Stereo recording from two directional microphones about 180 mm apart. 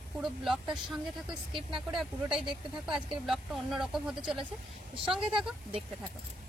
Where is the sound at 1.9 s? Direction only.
Centre (ahead or behind).